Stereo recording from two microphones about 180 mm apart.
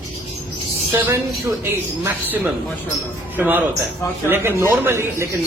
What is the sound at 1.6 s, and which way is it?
Speech, 15° right (ahead or behind).